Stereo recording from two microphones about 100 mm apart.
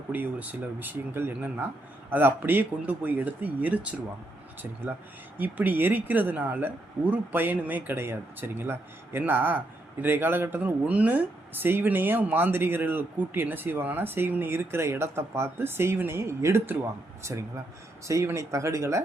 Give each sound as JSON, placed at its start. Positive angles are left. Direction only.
{"t": 0.1, "sound": "speech", "side_deg": -15}
{"t": 5.4, "sound": "speech", "side_deg": -20}
{"t": 18.1, "sound": "speech", "side_deg": -30}